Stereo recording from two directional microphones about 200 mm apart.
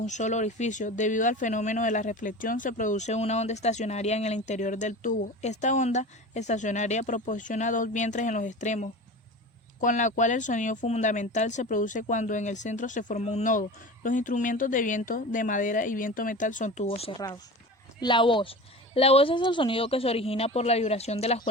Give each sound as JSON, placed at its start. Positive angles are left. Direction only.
{"t": 0.0, "sound": "speech", "side_deg": 35}
{"t": 17.2, "sound": "speech", "side_deg": 20}